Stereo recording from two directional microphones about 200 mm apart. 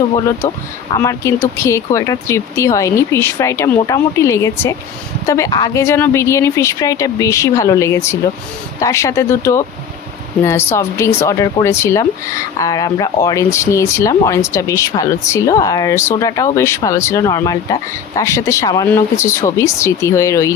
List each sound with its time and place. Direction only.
0.9 s speech: 15° left (ahead or behind)